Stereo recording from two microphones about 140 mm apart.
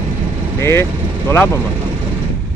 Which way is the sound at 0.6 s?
15° left (ahead or behind).